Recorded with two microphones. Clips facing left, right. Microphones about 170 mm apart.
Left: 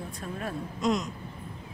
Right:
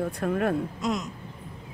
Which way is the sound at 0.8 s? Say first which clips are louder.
Left 1 dB; centre (ahead or behind).